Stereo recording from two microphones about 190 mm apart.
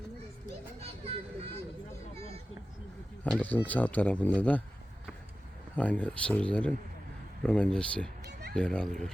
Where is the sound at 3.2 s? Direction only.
10° left (ahead or behind).